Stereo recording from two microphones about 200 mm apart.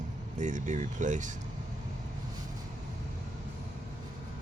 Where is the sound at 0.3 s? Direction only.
40° right (ahead or behind).